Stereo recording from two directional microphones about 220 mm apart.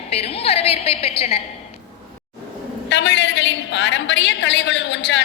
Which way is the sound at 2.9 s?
55° left (ahead or behind).